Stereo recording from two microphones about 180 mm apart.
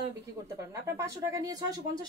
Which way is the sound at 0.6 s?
15° right (ahead or behind).